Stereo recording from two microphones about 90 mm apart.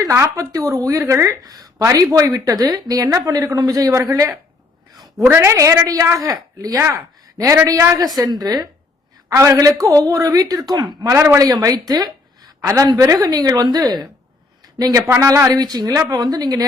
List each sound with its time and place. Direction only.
0.1 s a woman's voice: 30° right (ahead or behind)
1.4 s a woman's voice: 45° right (ahead or behind)
8.2 s speech: 45° right (ahead or behind)
9.3 s a woman's voice: 35° right (ahead or behind); by 11.1 s 50° right (ahead or behind)
11.1 s a man's voice: 30° right (ahead or behind)
11.3 s a woman's voice: 45° right (ahead or behind)
12.6 s a woman's voice: 35° right (ahead or behind)